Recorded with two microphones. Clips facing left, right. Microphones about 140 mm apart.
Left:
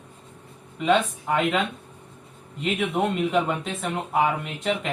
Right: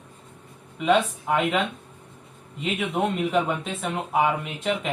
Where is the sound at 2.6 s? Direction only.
Centre (ahead or behind).